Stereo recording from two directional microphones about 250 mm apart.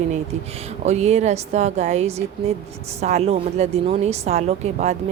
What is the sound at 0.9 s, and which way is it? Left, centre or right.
Speech, right.